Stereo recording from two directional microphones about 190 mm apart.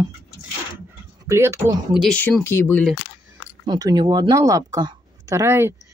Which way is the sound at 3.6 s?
20° right (ahead or behind).